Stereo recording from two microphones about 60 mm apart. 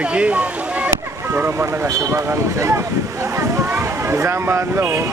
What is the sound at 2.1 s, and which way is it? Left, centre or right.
Speech, right.